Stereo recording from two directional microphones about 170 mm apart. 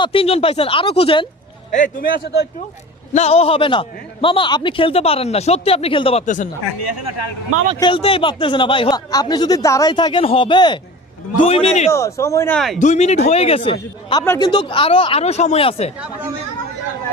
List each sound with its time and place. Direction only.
0.0 s a man's voice: 35° left (ahead or behind)
1.7 s a man's voice: 50° left (ahead or behind); by 2.5 s 70° left (ahead or behind)
3.1 s a man's voice: 40° left (ahead or behind)
6.2 s speech: 50° left (ahead or behind)
7.8 s a man's voice: 30° left (ahead or behind)
11.9 s speech: 15° left (ahead or behind)
12.5 s speech: centre (ahead or behind)
12.8 s a man's voice: 40° left (ahead or behind)
14.2 s a man's voice: 20° left (ahead or behind)